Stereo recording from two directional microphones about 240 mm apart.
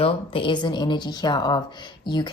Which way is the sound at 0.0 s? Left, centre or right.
Left.